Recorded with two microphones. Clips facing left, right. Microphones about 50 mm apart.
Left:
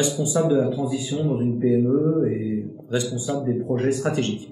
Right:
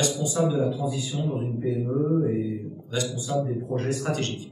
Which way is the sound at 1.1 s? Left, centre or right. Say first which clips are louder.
Left 6 dB; left.